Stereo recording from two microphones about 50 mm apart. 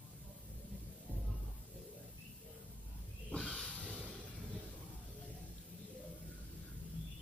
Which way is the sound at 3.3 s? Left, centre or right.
Centre.